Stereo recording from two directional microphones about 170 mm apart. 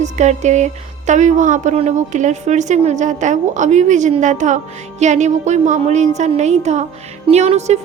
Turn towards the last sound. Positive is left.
turn(degrees=-40)  # may be behind; listen again after turning